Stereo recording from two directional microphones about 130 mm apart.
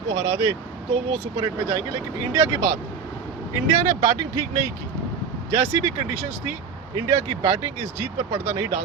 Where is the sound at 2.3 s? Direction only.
20° right (ahead or behind).